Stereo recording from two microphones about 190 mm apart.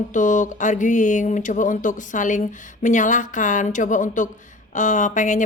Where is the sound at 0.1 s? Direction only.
40° left (ahead or behind).